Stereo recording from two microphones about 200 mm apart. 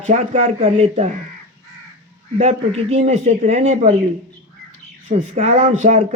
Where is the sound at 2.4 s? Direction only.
35° right (ahead or behind).